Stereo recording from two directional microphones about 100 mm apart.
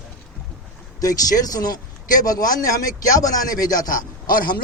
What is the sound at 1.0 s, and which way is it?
A man's voice, 35° left (ahead or behind).